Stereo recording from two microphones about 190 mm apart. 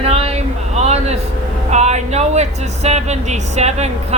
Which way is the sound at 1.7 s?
35° right (ahead or behind).